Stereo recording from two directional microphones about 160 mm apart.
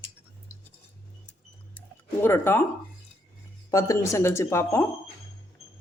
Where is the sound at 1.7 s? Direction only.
15° left (ahead or behind).